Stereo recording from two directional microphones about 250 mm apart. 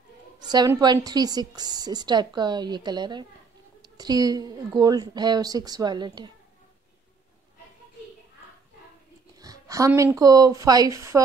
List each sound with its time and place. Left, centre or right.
0.4 s a woman's voice: centre
9.4 s a woman's voice: centre